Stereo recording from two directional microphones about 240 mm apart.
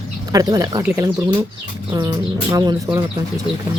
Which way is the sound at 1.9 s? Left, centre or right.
Centre.